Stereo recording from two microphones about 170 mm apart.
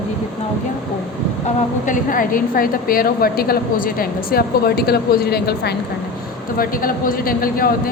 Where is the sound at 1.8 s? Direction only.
50° left (ahead or behind); by 5.7 s 70° left (ahead or behind).